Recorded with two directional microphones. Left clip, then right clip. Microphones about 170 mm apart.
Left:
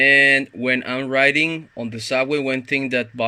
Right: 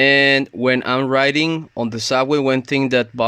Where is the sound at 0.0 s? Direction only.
35° right (ahead or behind).